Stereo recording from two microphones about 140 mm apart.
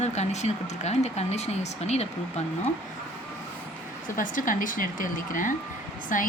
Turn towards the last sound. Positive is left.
turn(degrees=70)  # may be behind; listen again after turning